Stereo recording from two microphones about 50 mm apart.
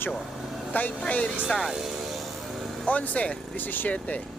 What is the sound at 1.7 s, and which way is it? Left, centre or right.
Vehicle, centre.